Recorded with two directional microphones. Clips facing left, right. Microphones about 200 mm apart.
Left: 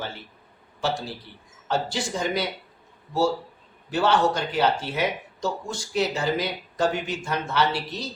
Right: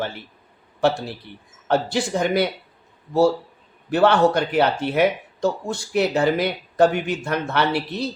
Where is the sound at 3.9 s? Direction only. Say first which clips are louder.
Right 5 dB; 60° right (ahead or behind).